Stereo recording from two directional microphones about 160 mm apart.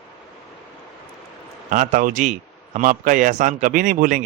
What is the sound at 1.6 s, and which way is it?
A woman's voice, 55° right (ahead or behind).